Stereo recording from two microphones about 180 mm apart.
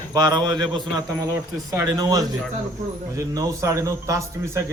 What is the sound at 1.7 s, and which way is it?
A man's voice, 20° right (ahead or behind).